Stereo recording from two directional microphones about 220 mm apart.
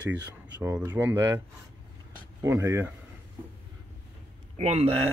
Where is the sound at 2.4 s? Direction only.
15° right (ahead or behind).